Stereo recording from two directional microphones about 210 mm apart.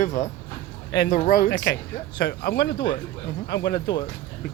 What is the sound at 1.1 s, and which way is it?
Speech, 40° left (ahead or behind).